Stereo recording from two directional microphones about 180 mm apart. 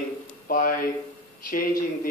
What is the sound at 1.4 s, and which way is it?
Speech, 55° left (ahead or behind).